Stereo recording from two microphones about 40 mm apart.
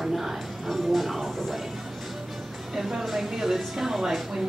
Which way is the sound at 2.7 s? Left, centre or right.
Centre.